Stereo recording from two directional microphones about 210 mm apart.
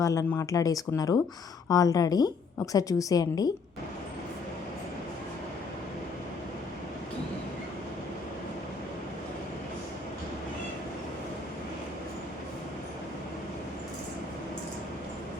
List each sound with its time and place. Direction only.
0.0 s speech: 15° left (ahead or behind)